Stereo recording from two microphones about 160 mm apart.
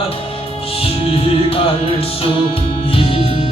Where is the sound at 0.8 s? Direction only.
35° left (ahead or behind).